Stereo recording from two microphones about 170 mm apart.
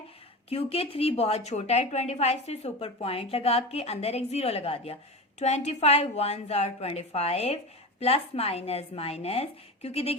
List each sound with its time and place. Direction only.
0.5 s a woman's voice: 35° left (ahead or behind)